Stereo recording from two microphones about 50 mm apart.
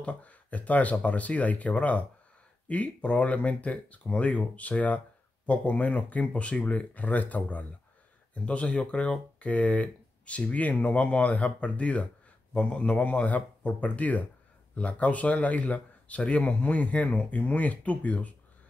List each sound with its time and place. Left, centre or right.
0.0 s speech: left